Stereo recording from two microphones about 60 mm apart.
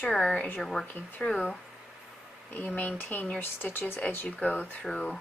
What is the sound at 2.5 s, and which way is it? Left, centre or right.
Speech, left.